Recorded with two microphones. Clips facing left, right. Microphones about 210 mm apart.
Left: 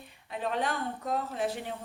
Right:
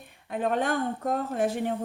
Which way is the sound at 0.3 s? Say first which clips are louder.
Right 5 dB; 50° right (ahead or behind).